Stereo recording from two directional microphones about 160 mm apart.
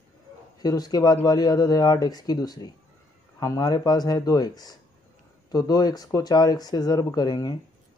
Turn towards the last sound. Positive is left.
turn(degrees=25)  # may be behind; listen again after turning